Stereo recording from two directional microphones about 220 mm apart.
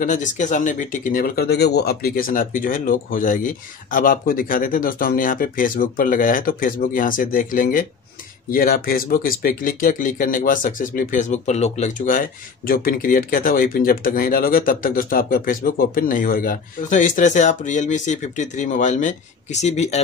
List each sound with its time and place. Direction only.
0.0 s speech: 35° left (ahead or behind)